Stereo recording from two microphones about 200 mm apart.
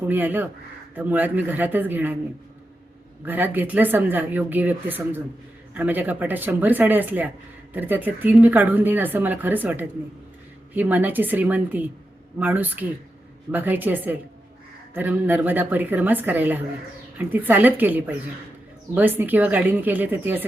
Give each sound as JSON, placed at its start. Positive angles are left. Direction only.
{"t": 0.1, "sound": "a woman's voice", "side_deg": -10}
{"t": 3.2, "sound": "a woman's voice", "side_deg": -10}